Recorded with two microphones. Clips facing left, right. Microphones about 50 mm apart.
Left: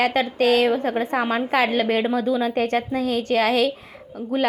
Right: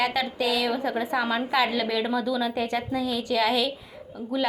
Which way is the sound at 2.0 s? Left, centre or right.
Left.